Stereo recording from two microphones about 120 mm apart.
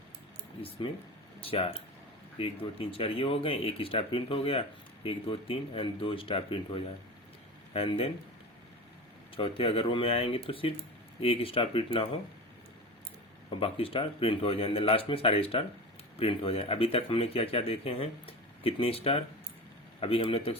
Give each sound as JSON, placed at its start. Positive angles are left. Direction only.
{"t": 1.4, "sound": "speech", "side_deg": 50}
{"t": 9.3, "sound": "speech", "side_deg": 50}
{"t": 13.6, "sound": "speech", "side_deg": 50}